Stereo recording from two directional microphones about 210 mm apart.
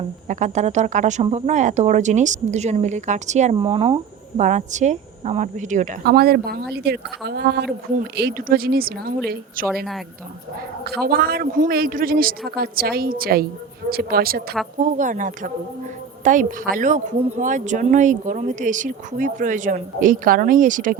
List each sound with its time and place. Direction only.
0.3 s a woman's voice: 35° right (ahead or behind)
11.0 s a woman's voice: 45° right (ahead or behind)